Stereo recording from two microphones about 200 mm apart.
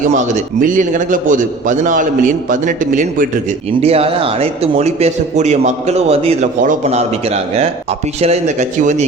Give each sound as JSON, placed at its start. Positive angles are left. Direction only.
{"t": 0.3, "sound": "a man's voice", "side_deg": -40}